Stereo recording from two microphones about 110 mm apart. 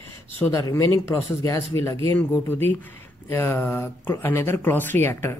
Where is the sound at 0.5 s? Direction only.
30° left (ahead or behind).